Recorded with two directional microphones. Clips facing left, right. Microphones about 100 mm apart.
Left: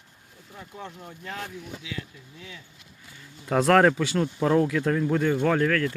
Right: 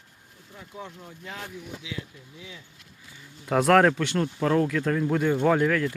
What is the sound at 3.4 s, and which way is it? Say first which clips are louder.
Speech: even; centre (ahead or behind).